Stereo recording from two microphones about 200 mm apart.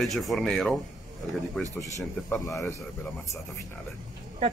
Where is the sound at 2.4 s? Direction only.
15° left (ahead or behind).